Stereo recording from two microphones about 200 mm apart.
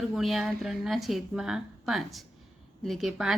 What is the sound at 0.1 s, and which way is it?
A woman's voice, centre (ahead or behind).